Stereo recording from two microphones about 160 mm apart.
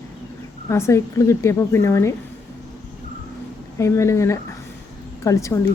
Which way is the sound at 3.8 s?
20° left (ahead or behind).